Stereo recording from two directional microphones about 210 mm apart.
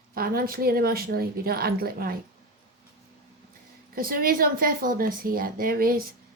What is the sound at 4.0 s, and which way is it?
Speech, 45° right (ahead or behind).